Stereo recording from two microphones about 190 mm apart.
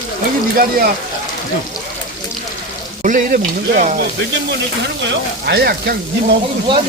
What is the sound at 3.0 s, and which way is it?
Stir, 45° right (ahead or behind).